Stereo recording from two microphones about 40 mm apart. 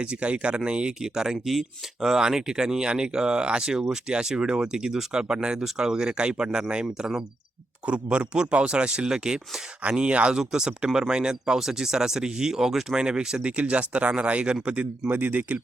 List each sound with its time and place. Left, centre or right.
0.0 s speech: right
1.0 s speech: centre
10.0 s speech: right
10.3 s speech: centre
13.0 s speech: right
15.1 s speech: right